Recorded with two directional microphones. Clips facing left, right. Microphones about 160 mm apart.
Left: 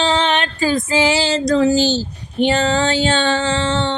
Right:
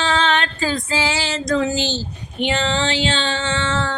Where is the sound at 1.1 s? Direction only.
30° left (ahead or behind).